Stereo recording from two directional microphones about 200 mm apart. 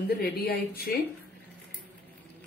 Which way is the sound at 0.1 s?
50° left (ahead or behind).